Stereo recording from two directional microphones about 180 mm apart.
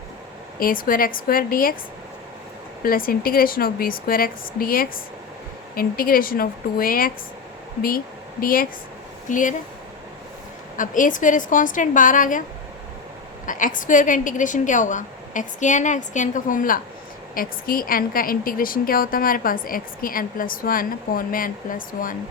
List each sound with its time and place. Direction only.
0.6 s a woman's voice: 50° left (ahead or behind)
2.8 s a woman's voice: 55° left (ahead or behind)
10.8 s a woman's voice: 45° left (ahead or behind)
13.4 s a woman's voice: 45° left (ahead or behind)